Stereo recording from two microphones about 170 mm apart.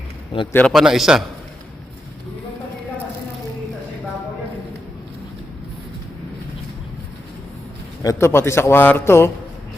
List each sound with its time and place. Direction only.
0.3 s a man's voice: 30° left (ahead or behind)
0.7 s a man's voice: centre (ahead or behind)
8.0 s a man's voice: 15° left (ahead or behind)